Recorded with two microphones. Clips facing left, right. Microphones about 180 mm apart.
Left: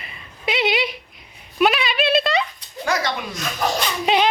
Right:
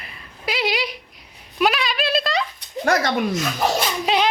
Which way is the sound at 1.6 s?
Centre (ahead or behind).